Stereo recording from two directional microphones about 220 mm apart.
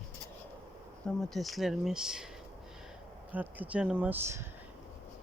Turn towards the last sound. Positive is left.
turn(degrees=-10)  # may be behind; listen again after turning